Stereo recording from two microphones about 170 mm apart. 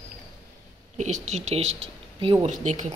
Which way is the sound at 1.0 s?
40° right (ahead or behind).